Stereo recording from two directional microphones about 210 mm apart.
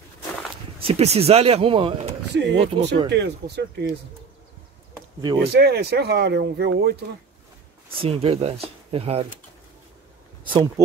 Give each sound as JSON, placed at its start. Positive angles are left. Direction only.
{"t": 0.8, "sound": "speech", "side_deg": -30}
{"t": 2.3, "sound": "speech", "side_deg": -50}
{"t": 5.2, "sound": "speech", "side_deg": -20}
{"t": 5.5, "sound": "speech", "side_deg": -50}
{"t": 8.0, "sound": "speech", "side_deg": -25}
{"t": 10.4, "sound": "speech", "side_deg": -25}